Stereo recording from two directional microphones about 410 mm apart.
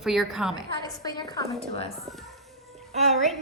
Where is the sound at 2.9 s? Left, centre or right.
Centre.